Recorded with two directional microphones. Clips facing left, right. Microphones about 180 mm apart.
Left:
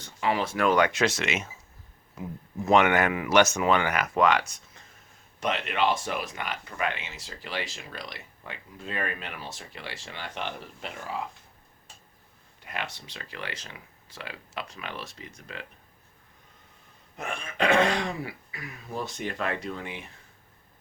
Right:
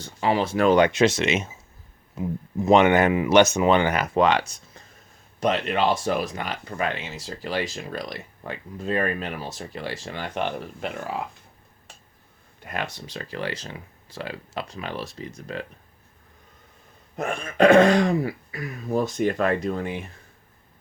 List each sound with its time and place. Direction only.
0.0 s speech: 30° right (ahead or behind); by 11.1 s 55° right (ahead or behind)
12.6 s speech: 45° right (ahead or behind)
17.2 s speech: 45° right (ahead or behind)